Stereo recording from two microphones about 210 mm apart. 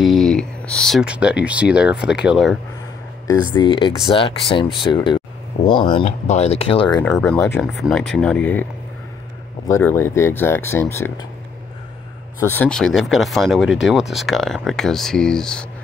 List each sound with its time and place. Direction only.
0.0 s speech: centre (ahead or behind)
3.3 s speech: 20° left (ahead or behind)
7.0 s speech: 5° left (ahead or behind)
9.7 s speech: 10° left (ahead or behind)
12.4 s speech: 10° left (ahead or behind)